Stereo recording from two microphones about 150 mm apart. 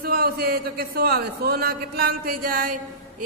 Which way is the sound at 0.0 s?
90° right.